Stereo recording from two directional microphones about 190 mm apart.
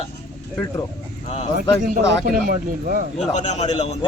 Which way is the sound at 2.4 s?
50° right (ahead or behind).